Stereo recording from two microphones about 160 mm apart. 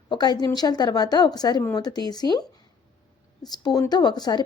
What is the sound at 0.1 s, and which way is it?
Speech, 25° left (ahead or behind).